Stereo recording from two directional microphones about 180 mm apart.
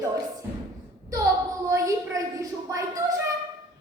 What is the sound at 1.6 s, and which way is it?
A woman's voice, 15° right (ahead or behind).